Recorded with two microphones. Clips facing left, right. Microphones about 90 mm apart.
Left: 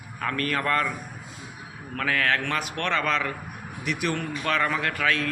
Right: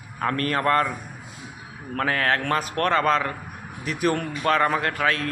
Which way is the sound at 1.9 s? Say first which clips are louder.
Right 2 dB; 35° right (ahead or behind).